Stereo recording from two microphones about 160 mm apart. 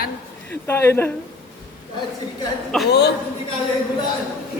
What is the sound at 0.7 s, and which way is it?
Speech, 15° left (ahead or behind).